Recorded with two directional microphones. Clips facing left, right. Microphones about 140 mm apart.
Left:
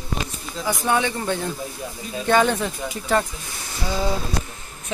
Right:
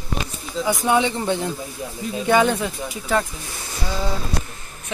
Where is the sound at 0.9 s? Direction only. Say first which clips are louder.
Right 2 dB; 20° right (ahead or behind); by 3.3 s centre (ahead or behind).